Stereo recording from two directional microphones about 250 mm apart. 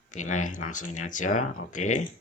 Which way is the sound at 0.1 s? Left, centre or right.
Left.